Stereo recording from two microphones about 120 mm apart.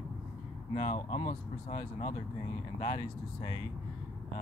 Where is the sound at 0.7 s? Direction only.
55° left (ahead or behind).